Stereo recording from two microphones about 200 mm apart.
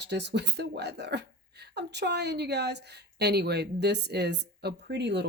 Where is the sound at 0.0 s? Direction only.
60° right (ahead or behind).